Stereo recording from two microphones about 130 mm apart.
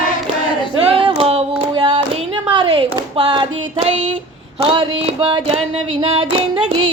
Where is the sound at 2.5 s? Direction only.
40° right (ahead or behind).